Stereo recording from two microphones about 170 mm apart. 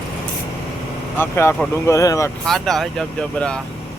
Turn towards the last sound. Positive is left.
turn(degrees=5)  # may be behind; listen again after turning